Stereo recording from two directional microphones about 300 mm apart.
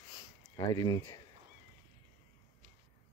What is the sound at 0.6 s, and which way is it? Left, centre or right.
Speech, centre.